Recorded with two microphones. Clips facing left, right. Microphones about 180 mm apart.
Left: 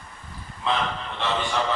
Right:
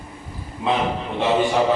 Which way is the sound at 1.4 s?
15° right (ahead or behind).